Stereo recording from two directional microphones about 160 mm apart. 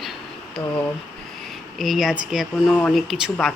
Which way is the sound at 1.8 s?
Centre (ahead or behind).